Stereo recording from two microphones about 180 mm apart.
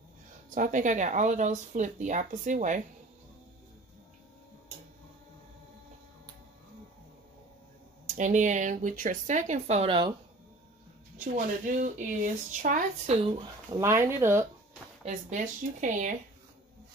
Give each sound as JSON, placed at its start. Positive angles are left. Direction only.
{"t": 0.6, "sound": "speech", "side_deg": -45}
{"t": 8.2, "sound": "speech", "side_deg": -45}
{"t": 11.1, "sound": "speech", "side_deg": -50}
{"t": 13.7, "sound": "speech", "side_deg": -15}
{"t": 15.0, "sound": "speech", "side_deg": -40}